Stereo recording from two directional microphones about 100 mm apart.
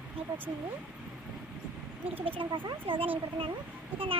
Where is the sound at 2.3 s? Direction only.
55° right (ahead or behind).